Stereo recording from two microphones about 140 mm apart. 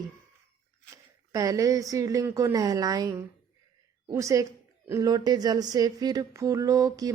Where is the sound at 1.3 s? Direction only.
25° right (ahead or behind).